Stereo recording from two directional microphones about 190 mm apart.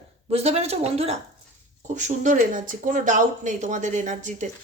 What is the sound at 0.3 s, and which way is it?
Speech, 35° right (ahead or behind).